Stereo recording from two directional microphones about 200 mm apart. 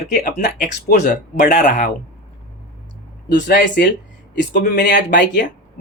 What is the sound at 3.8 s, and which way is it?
Speech, 60° left (ahead or behind).